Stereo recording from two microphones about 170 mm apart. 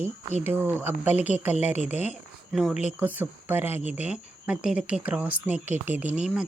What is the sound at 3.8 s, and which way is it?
Speech, 40° left (ahead or behind).